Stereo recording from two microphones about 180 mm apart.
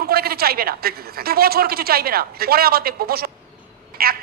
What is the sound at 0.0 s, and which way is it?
A man's voice, 60° right (ahead or behind).